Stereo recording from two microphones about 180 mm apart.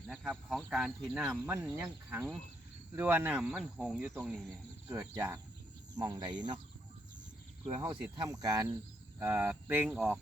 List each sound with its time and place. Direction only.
0.1 s speech: centre (ahead or behind)
3.4 s speech: centre (ahead or behind)
4.9 s speech: 15° right (ahead or behind)
7.8 s speech: 20° right (ahead or behind)